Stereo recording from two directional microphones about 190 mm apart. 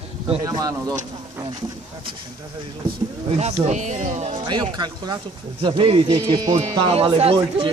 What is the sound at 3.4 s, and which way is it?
Speech, 40° right (ahead or behind).